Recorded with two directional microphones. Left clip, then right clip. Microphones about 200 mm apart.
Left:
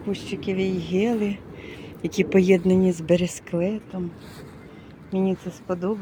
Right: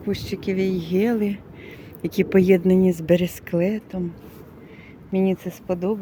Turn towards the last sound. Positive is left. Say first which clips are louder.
# right 2 dB
turn(degrees=-20)  # may be behind; listen again after turning